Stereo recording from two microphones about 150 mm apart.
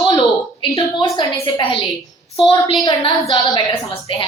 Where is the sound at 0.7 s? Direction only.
30° left (ahead or behind).